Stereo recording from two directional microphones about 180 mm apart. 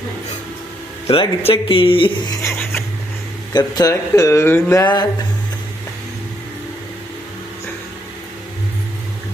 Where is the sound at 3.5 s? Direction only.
20° left (ahead or behind).